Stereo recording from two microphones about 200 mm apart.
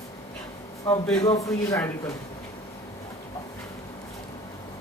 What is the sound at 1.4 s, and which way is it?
Speech, 15° left (ahead or behind).